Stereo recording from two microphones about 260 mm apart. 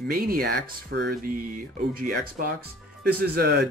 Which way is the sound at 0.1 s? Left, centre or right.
Right.